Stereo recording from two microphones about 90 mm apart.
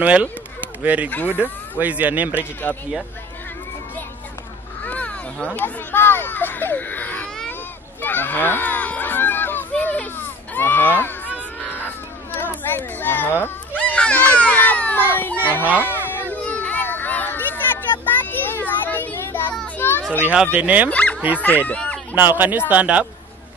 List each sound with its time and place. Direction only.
0.0 s speech: 15° right (ahead or behind)
1.1 s speech: 20° left (ahead or behind)
1.4 s speech: 15° right (ahead or behind)
2.7 s speech: 15° left (ahead or behind)
4.8 s speech: 15° left (ahead or behind)
8.0 s children playing: 20° left (ahead or behind)
12.4 s a sound: 25° left (ahead or behind)
18.0 s child singing: 20° left (ahead or behind)
19.8 s children playing: 25° left (ahead or behind)
20.1 s speech: 15° right (ahead or behind)
20.9 s bow-wow: 15° left (ahead or behind)
21.4 s speech: 20° left (ahead or behind)
21.7 s a sound: 10° left (ahead or behind)
22.1 s speech: 20° right (ahead or behind)